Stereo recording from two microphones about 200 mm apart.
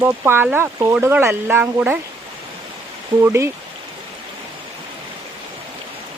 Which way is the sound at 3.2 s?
15° right (ahead or behind).